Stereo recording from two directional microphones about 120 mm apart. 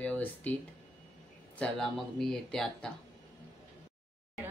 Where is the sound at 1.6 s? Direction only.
5° left (ahead or behind).